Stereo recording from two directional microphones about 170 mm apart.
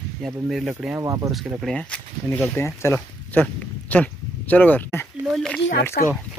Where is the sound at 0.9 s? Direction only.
20° right (ahead or behind).